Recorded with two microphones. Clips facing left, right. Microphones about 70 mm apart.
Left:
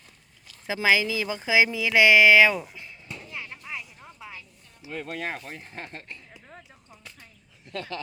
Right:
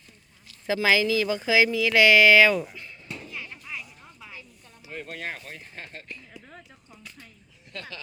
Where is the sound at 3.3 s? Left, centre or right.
Left.